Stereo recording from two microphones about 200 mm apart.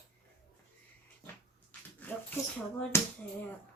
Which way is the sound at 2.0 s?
10° left (ahead or behind).